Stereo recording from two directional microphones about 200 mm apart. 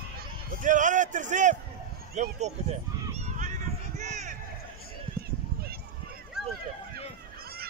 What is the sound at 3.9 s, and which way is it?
Run, 35° right (ahead or behind).